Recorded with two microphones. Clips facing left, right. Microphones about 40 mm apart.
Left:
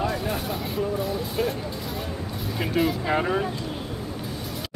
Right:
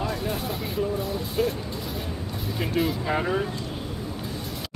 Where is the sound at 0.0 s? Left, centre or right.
Centre.